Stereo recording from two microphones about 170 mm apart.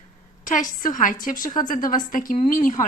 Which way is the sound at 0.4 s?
50° left (ahead or behind).